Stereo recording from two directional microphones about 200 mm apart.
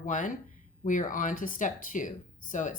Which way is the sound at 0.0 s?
40° left (ahead or behind).